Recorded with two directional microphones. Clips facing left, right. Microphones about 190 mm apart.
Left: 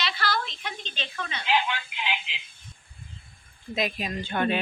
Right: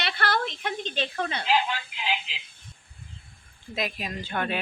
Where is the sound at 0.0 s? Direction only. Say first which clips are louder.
Right 2 dB; 60° right (ahead or behind); by 2.3 s 35° right (ahead or behind).